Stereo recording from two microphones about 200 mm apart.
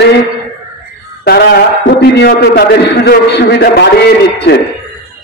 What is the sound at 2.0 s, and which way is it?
A man's voice, 55° left (ahead or behind).